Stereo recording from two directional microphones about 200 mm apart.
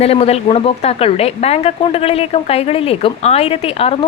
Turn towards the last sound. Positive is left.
turn(degrees=30)  # may be behind; listen again after turning